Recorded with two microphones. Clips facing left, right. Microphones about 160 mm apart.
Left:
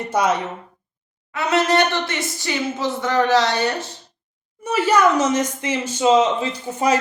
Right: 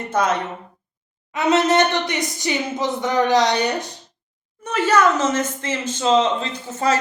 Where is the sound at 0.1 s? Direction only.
10° left (ahead or behind).